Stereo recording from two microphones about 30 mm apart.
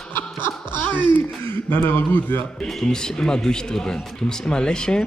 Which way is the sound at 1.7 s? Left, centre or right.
Left.